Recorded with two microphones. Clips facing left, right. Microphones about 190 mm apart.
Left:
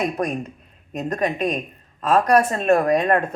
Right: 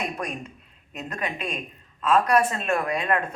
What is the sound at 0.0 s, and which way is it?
A man's voice, 40° left (ahead or behind).